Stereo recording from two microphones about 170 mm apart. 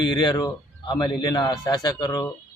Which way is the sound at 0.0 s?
25° left (ahead or behind).